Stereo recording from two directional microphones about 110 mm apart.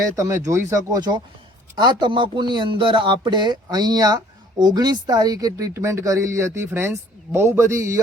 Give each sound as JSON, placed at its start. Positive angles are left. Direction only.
{"t": 0.0, "sound": "speech", "side_deg": -30}